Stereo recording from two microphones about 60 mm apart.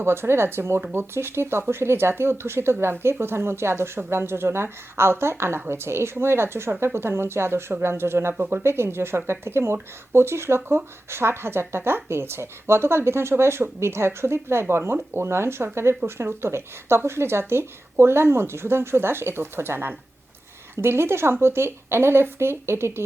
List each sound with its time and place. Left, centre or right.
0.0 s speech: right